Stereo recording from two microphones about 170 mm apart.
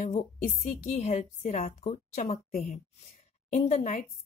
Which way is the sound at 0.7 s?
40° left (ahead or behind).